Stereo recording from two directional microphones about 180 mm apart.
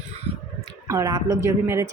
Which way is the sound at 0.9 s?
20° right (ahead or behind).